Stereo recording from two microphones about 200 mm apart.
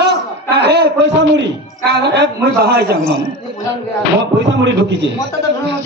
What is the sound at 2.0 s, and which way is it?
Speech, 55° right (ahead or behind).